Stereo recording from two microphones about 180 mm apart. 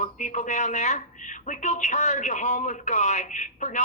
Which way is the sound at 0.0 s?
45° left (ahead or behind).